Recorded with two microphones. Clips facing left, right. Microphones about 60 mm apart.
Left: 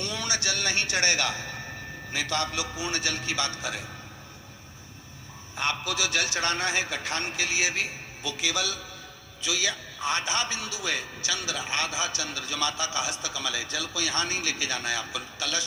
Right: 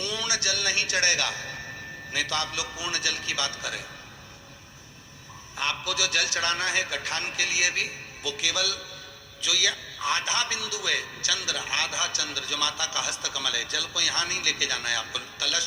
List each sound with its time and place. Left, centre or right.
0.0 s a man's voice: left
5.5 s a man's voice: left